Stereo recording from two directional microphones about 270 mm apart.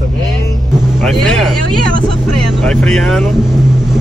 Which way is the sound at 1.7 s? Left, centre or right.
Right.